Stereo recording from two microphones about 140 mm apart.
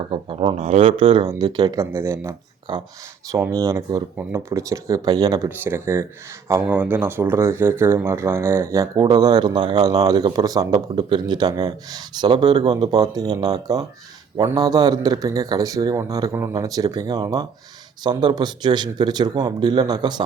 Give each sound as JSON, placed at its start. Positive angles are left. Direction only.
{"t": 0.0, "sound": "speech", "side_deg": -40}
{"t": 0.9, "sound": "speech", "side_deg": -40}
{"t": 2.7, "sound": "speech", "side_deg": -35}
{"t": 3.3, "sound": "speech", "side_deg": -20}